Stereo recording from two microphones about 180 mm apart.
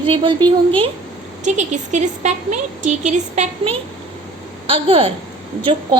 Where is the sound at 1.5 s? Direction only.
40° right (ahead or behind).